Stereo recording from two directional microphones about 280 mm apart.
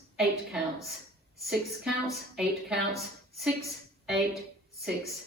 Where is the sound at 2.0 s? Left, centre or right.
Centre.